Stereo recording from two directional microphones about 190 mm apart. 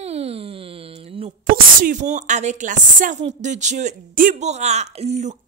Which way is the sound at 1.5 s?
45° right (ahead or behind).